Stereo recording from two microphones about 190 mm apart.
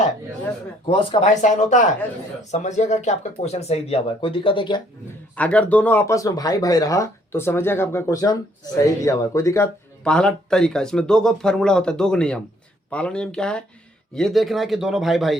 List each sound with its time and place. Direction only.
0.9 s speech: 30° left (ahead or behind)
5.3 s speech: 5° left (ahead or behind)
10.1 s speech: 5° left (ahead or behind)